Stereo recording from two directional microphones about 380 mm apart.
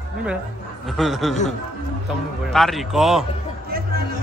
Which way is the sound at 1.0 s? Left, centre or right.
Centre.